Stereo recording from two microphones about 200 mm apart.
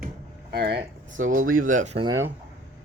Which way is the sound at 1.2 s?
85° right.